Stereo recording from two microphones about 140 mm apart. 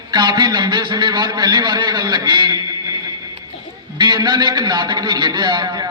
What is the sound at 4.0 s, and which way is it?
A man's voice, 30° right (ahead or behind).